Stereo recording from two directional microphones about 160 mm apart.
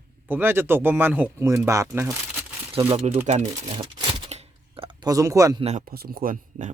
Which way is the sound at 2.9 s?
40° right (ahead or behind).